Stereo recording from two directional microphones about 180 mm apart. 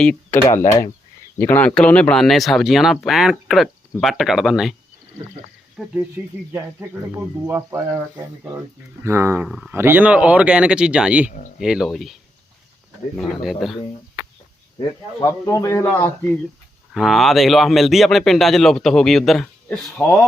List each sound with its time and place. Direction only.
0.0 s speech: 5° left (ahead or behind)
0.4 s speech: 45° left (ahead or behind)
1.4 s speech: 10° left (ahead or behind)
5.8 s speech: centre (ahead or behind)
6.5 s speech: 15° right (ahead or behind)
13.1 s speech: centre (ahead or behind)
14.8 s a man's voice: 20° left (ahead or behind)
16.9 s speech: centre (ahead or behind)